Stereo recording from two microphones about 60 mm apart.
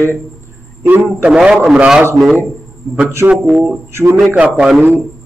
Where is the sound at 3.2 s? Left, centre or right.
Right.